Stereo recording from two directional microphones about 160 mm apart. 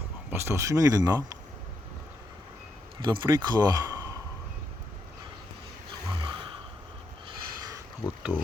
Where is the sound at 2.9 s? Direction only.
30° right (ahead or behind).